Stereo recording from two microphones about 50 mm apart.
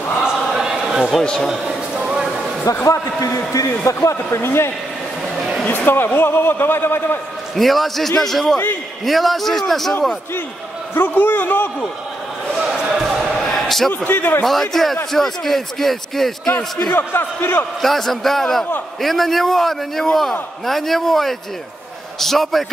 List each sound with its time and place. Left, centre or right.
0.2 s a sound: centre
1.2 s a man's voice: centre
2.8 s a man's voice: left
5.7 s a man's voice: left
7.5 s speech: centre
11.0 s a man's voice: left
12.5 s basketball bounce: centre
13.3 s basketball bounce: centre
14.0 s a man's voice: left
14.4 s speech: centre
16.9 s a man's voice: left
17.8 s a man's voice: centre